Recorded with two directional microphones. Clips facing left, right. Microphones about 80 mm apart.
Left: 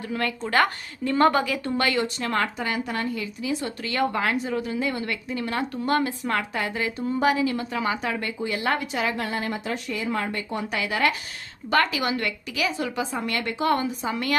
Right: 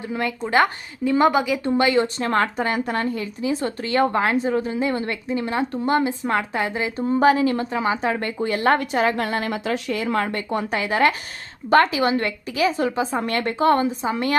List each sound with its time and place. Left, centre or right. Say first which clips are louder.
0.1 s a woman's voice: right 3 dB; centre
2.1 s a woman's voice: right 5 dB; right
7.1 s a woman's voice: right 6 dB; right
8.2 s a woman's voice: right 6 dB; right
9.2 s a woman's voice: right 4 dB; right
10.7 s a woman's voice: right 4 dB; right